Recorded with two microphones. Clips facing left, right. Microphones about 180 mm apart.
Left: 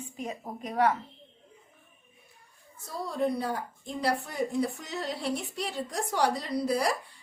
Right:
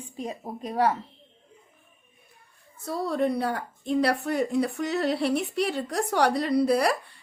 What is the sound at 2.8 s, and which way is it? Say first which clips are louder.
Speech: right 4 dB; 65° right (ahead or behind).